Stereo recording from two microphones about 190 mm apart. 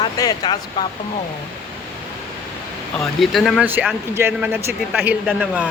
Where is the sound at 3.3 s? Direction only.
Centre (ahead or behind).